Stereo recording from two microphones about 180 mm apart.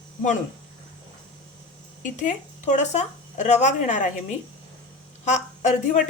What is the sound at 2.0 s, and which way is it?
Speech, 45° left (ahead or behind).